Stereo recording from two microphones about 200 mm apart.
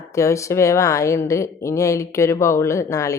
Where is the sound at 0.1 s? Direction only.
15° left (ahead or behind).